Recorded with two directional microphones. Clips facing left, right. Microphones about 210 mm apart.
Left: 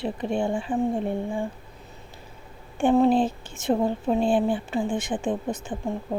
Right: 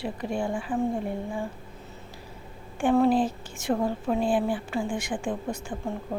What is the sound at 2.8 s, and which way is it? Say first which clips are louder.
Speech: left 2 dB; 20° left (ahead or behind).